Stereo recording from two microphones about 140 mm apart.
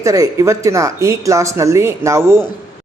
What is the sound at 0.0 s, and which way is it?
A man's voice, 25° right (ahead or behind).